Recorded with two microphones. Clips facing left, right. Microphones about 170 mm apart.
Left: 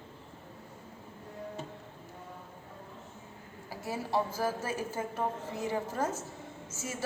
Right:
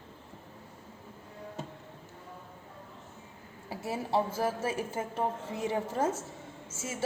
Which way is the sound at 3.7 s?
25° right (ahead or behind).